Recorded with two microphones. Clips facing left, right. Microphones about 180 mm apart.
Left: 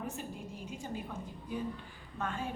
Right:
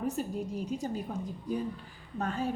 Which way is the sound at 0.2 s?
40° right (ahead or behind).